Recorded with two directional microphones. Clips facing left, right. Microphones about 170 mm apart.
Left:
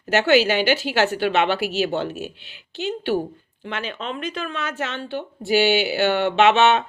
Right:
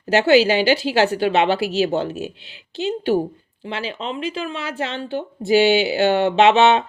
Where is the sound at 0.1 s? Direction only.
35° right (ahead or behind).